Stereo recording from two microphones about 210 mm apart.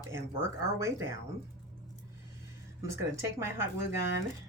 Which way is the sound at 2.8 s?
15° right (ahead or behind).